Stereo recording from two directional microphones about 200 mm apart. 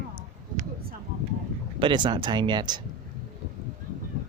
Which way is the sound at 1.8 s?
25° right (ahead or behind).